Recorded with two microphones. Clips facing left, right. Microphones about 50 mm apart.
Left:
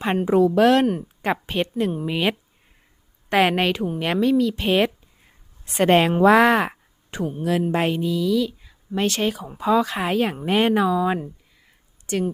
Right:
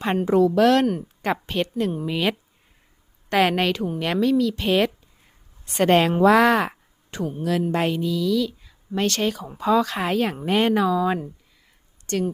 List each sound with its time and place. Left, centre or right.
0.0 s a woman's voice: centre